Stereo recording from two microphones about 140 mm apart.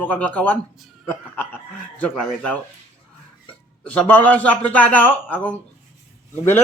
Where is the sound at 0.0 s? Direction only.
10° left (ahead or behind).